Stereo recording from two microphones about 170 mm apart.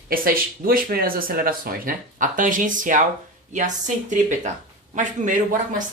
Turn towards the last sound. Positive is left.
turn(degrees=-45)  # may be behind; listen again after turning